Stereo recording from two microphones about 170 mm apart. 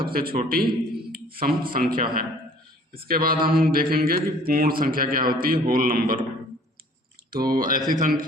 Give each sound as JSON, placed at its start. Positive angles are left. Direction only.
{"t": 0.1, "sound": "a man's voice", "side_deg": -60}
{"t": 7.3, "sound": "a man's voice", "side_deg": -60}